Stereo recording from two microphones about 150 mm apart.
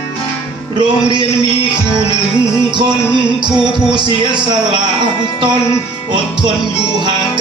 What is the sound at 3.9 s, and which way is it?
Speech, 30° right (ahead or behind).